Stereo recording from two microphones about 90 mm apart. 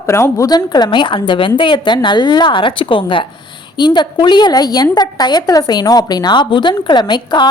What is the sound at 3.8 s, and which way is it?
A woman's voice, 55° left (ahead or behind).